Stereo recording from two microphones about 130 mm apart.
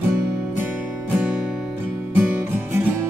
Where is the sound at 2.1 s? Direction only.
15° right (ahead or behind).